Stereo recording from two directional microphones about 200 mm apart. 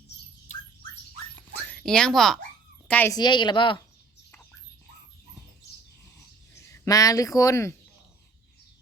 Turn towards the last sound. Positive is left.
turn(degrees=15)  # may be behind; listen again after turning